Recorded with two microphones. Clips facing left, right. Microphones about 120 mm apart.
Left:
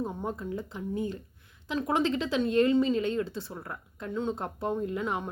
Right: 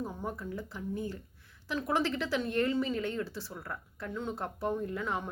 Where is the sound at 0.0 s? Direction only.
20° left (ahead or behind).